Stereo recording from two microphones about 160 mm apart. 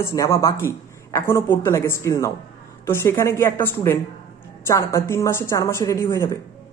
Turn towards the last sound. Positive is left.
turn(degrees=15)  # may be behind; listen again after turning